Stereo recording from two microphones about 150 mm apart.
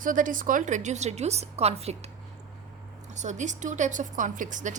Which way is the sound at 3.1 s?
50° right (ahead or behind).